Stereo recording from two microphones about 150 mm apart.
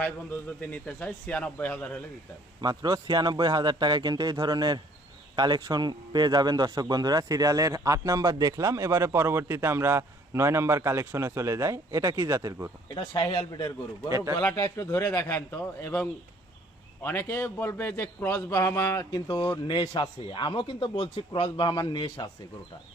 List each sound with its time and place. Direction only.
0.7 s a man's voice: 10° left (ahead or behind)
2.6 s speech: 30° right (ahead or behind)
12.9 s a man's voice: 30° left (ahead or behind)